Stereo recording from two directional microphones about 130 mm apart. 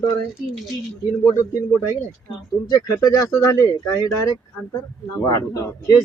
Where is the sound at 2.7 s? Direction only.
30° left (ahead or behind).